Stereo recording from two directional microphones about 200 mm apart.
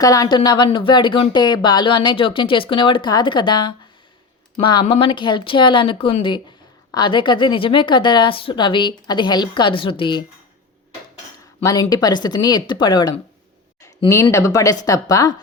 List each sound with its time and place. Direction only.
0.0 s speech: 15° left (ahead or behind)
11.6 s speech: 20° left (ahead or behind)